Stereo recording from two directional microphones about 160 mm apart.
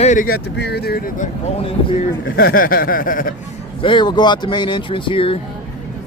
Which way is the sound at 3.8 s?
30° left (ahead or behind).